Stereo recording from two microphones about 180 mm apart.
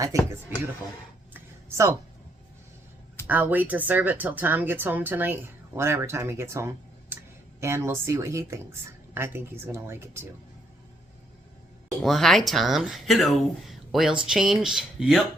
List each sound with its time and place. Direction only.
0.1 s speech: 15° right (ahead or behind)
1.3 s a sound: 15° right (ahead or behind)
3.2 s speech: 10° right (ahead or behind)
12.0 s speech: centre (ahead or behind)